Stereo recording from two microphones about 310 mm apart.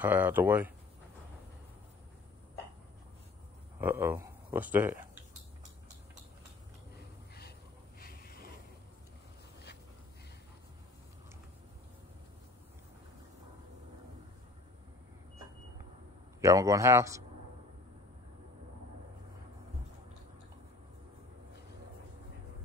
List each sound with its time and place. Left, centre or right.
0.0 s speech: centre
3.8 s speech: centre
8.0 s a sound: left
16.3 s speech: centre